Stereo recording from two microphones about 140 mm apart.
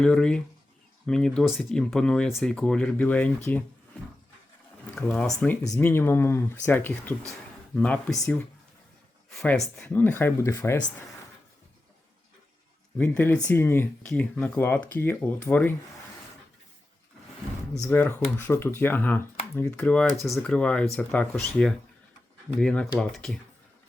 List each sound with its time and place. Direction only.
0.0 s speech: 5° left (ahead or behind)
4.9 s speech: 5° left (ahead or behind)
5.6 s speech: 20° left (ahead or behind)
9.3 s speech: centre (ahead or behind); by 10.8 s 20° left (ahead or behind)
13.0 s speech: 15° left (ahead or behind)
17.7 s speech: 20° left (ahead or behind)